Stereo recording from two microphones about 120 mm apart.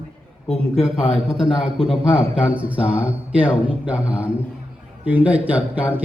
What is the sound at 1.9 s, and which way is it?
A man's voice, 10° right (ahead or behind).